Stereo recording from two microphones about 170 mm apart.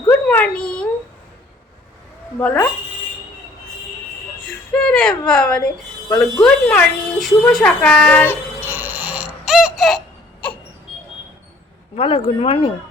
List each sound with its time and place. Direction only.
0.1 s a sound: 10° left (ahead or behind)
2.4 s speech: 10° left (ahead or behind)
4.7 s speech: 5° left (ahead or behind)
8.3 s baby laughter: 10° right (ahead or behind)
10.4 s a sound: 5° left (ahead or behind)
11.9 s speech: 30° left (ahead or behind)